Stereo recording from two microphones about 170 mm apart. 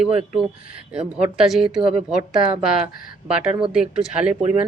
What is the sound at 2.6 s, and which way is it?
A woman's voice, 5° right (ahead or behind).